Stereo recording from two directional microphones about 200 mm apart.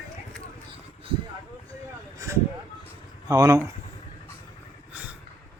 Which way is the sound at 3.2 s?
15° right (ahead or behind).